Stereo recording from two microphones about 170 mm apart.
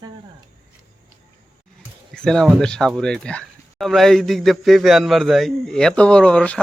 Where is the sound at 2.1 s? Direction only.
5° left (ahead or behind).